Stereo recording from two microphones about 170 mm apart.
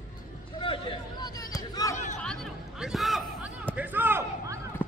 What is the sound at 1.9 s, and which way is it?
Chatter, 45° left (ahead or behind).